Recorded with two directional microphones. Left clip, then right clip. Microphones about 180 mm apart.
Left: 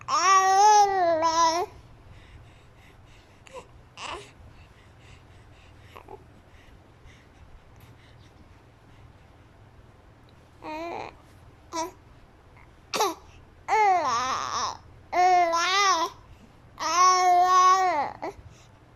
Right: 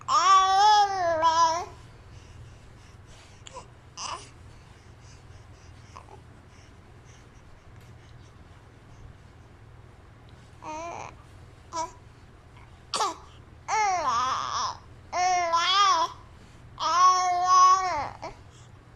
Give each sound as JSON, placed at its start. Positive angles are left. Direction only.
{"t": 0.0, "sound": "babbling", "side_deg": 15}
{"t": 3.4, "sound": "baby cry", "side_deg": 20}
{"t": 10.6, "sound": "babbling", "side_deg": 20}
{"t": 12.9, "sound": "cough", "side_deg": 15}
{"t": 13.7, "sound": "babbling", "side_deg": 20}